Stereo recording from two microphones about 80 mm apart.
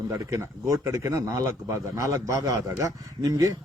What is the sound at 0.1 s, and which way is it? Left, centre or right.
A man's voice, right.